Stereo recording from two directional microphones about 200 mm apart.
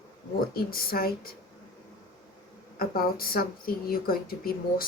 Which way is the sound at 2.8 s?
45° left (ahead or behind).